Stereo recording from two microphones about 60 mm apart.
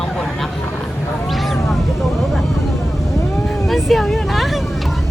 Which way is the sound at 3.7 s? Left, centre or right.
Centre.